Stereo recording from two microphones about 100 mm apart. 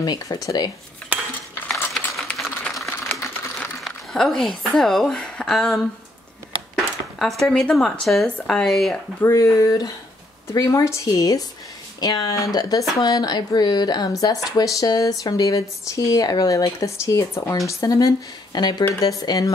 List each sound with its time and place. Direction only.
0.0 s speech: 45° left (ahead or behind)
1.1 s cutlery: 15° right (ahead or behind)
2.3 s a sound: centre (ahead or behind)
6.7 s speech: 5° left (ahead or behind)
9.2 s speech: 30° left (ahead or behind)